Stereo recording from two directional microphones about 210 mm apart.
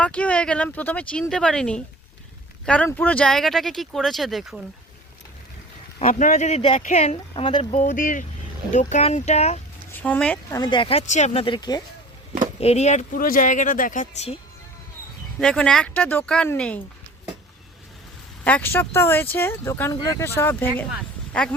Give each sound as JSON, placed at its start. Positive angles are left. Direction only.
{"t": 0.0, "sound": "speech", "side_deg": 5}
{"t": 6.0, "sound": "speech", "side_deg": 35}
{"t": 9.9, "sound": "speech", "side_deg": 10}
{"t": 15.4, "sound": "speech", "side_deg": 5}
{"t": 18.4, "sound": "speech", "side_deg": 10}